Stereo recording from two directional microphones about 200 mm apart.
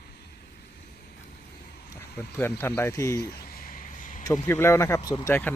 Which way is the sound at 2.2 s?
10° left (ahead or behind).